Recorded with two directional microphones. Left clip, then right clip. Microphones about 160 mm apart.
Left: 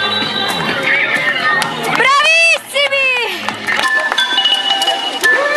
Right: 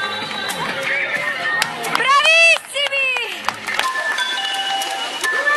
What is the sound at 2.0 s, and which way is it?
Run, centre (ahead or behind).